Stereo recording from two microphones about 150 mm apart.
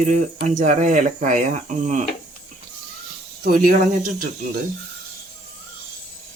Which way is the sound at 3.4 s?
65° right (ahead or behind).